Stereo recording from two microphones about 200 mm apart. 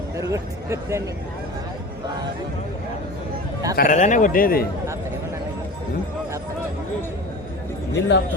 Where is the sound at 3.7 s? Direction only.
40° left (ahead or behind).